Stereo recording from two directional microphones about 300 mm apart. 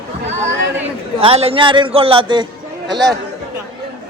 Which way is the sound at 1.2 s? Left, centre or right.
Centre.